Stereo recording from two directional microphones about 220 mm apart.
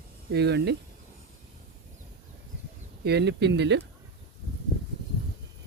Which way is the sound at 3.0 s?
50° right (ahead or behind).